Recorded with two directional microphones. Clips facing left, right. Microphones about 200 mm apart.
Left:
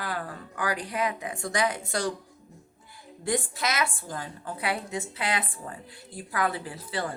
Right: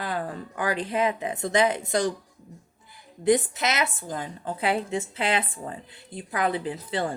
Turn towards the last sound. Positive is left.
turn(degrees=-25)  # may be behind; listen again after turning